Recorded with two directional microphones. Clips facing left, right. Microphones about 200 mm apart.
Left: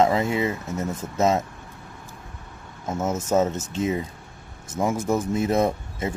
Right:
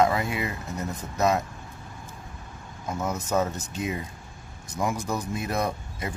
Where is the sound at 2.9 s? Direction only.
25° left (ahead or behind).